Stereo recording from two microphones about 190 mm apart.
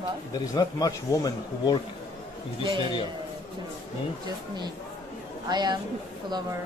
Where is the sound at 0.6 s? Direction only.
20° left (ahead or behind).